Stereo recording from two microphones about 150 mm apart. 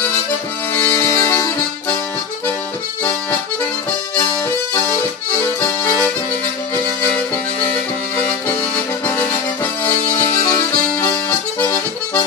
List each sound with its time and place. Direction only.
0.7 s music: 15° left (ahead or behind)
8.5 s accordion: 15° left (ahead or behind)